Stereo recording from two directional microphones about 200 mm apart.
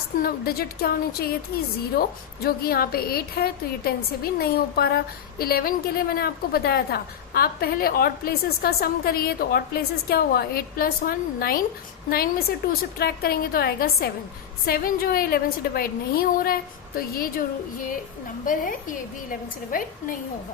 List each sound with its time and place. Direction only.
0.2 s a woman's voice: 50° left (ahead or behind)
18.4 s a woman's voice: 45° left (ahead or behind)